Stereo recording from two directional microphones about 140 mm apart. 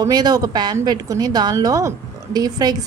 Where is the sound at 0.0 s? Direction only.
30° right (ahead or behind).